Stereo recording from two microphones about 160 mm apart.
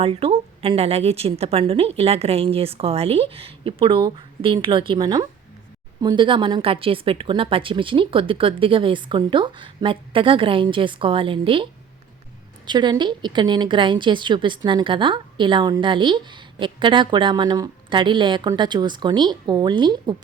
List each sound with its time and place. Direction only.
0.0 s a woman's voice: 35° right (ahead or behind)